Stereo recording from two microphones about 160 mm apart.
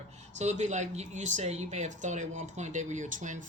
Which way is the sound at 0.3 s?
45° right (ahead or behind).